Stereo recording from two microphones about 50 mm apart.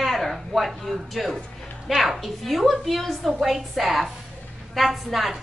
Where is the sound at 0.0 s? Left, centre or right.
Centre.